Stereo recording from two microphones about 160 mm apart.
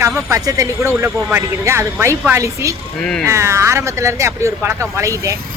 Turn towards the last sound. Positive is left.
turn(degrees=-20)  # may be behind; listen again after turning